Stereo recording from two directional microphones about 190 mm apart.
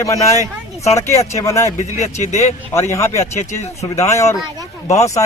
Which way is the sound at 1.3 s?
15° left (ahead or behind).